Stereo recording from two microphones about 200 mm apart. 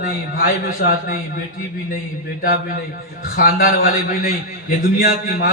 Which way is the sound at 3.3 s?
45° left (ahead or behind).